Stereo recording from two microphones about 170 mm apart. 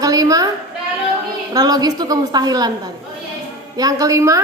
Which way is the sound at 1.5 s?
20° right (ahead or behind).